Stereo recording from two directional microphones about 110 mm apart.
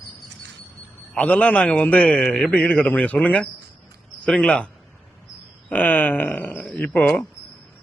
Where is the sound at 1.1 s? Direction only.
10° left (ahead or behind).